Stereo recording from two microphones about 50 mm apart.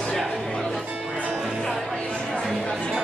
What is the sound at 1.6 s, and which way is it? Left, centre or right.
Music, centre.